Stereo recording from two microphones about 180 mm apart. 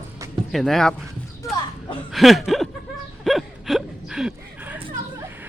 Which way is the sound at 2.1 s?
Centre (ahead or behind).